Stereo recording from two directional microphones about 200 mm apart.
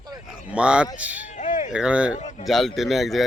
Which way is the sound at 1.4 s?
40° left (ahead or behind).